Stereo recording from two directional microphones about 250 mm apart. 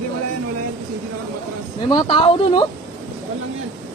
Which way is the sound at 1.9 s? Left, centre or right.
Centre.